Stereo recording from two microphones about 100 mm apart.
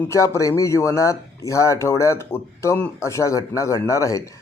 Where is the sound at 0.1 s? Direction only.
30° left (ahead or behind).